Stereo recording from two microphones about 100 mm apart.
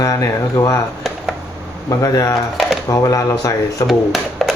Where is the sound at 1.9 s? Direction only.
30° left (ahead or behind).